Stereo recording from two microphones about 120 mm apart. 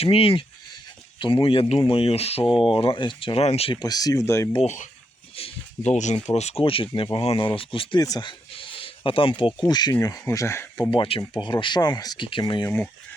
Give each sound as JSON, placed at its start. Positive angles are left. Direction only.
{"t": 0.0, "sound": "speech", "side_deg": 50}
{"t": 2.5, "sound": "speech", "side_deg": 0}
{"t": 2.7, "sound": "speech", "side_deg": 45}
{"t": 3.4, "sound": "speech", "side_deg": 55}
{"t": 3.8, "sound": "speech", "side_deg": 35}
{"t": 4.6, "sound": "speech", "side_deg": 80}
{"t": 5.4, "sound": "a sound", "side_deg": 60}
{"t": 6.2, "sound": "speech", "side_deg": 65}
{"t": 8.0, "sound": "a sound", "side_deg": 35}
{"t": 9.6, "sound": "speech", "side_deg": 35}
{"t": 10.9, "sound": "speech", "side_deg": 45}
{"t": 12.6, "sound": "speech", "side_deg": 15}